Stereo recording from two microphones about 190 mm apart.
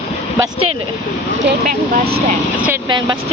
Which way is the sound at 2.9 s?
25° right (ahead or behind).